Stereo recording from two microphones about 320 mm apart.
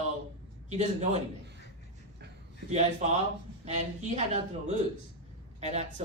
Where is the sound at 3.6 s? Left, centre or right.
Right.